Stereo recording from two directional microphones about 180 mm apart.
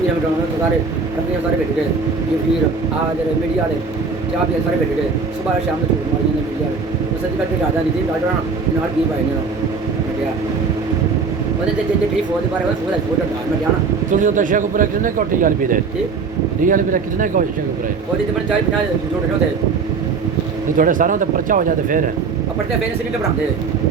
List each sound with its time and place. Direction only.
14.1 s a man's voice: 45° right (ahead or behind)
20.7 s a man's voice: 50° right (ahead or behind)